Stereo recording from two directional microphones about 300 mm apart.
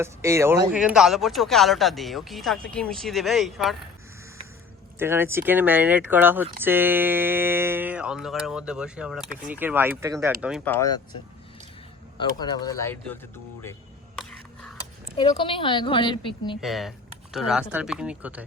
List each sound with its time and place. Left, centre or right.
0.0 s speech: centre
4.9 s speech: centre
10.4 s a woman's voice: centre
12.1 s a woman's voice: centre
14.2 s a sound: centre
15.2 s a woman's voice: centre
16.6 s speech: centre